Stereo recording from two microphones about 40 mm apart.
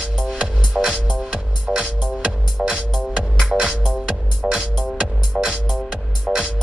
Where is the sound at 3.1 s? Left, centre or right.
Right.